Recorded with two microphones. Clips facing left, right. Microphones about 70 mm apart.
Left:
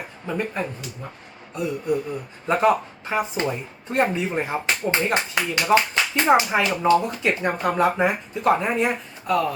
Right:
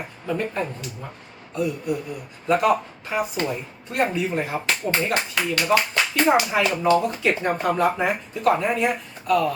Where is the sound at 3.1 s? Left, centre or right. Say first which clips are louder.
Left 1 dB; left.